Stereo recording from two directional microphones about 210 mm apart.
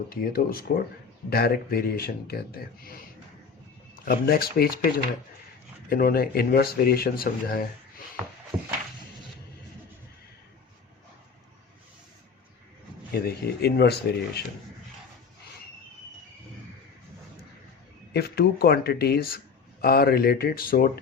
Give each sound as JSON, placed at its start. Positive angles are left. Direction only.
{"t": 0.1, "sound": "speech", "side_deg": 45}
{"t": 5.9, "sound": "speech", "side_deg": 45}
{"t": 13.1, "sound": "speech", "side_deg": 50}
{"t": 18.1, "sound": "speech", "side_deg": 50}